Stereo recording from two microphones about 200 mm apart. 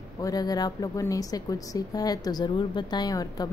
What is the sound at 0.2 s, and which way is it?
A woman's voice, 20° left (ahead or behind).